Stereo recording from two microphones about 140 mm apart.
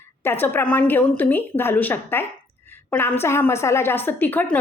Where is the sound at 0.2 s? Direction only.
15° left (ahead or behind).